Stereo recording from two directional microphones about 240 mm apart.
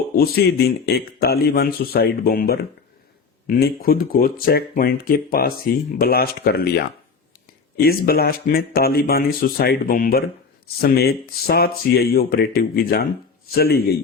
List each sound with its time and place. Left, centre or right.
0.2 s speech: left